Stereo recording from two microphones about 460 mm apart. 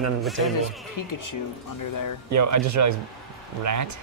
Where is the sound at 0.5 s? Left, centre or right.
Left.